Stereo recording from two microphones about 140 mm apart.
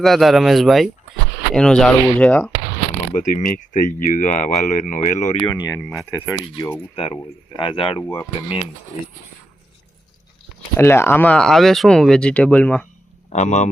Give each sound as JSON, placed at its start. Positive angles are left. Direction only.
{"t": 0.0, "sound": "speech", "side_deg": 0}
{"t": 3.1, "sound": "speech", "side_deg": 65}
{"t": 5.4, "sound": "speech", "side_deg": 30}
{"t": 5.8, "sound": "speech", "side_deg": 0}
{"t": 6.1, "sound": "speech", "side_deg": 20}
{"t": 10.8, "sound": "speech", "side_deg": 15}
{"t": 13.3, "sound": "speech", "side_deg": 60}